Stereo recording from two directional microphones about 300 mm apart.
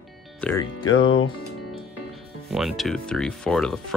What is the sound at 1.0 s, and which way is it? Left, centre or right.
Speech, left.